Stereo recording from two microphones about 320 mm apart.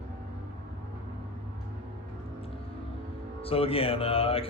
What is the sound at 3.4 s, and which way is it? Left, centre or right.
A man's voice, centre.